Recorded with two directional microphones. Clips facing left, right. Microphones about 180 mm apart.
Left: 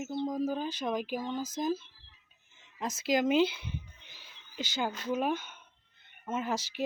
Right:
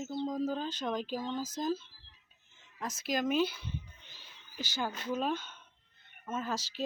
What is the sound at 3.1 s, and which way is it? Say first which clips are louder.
Speech: left 4 dB; 25° left (ahead or behind).